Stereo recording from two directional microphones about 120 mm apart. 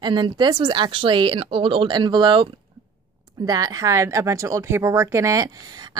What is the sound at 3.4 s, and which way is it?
Speech, 30° right (ahead or behind).